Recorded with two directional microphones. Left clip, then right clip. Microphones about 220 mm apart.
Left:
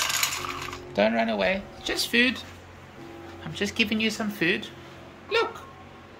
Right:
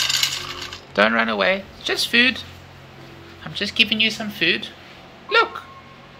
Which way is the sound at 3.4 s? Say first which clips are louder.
Right 7 dB; 15° left (ahead or behind).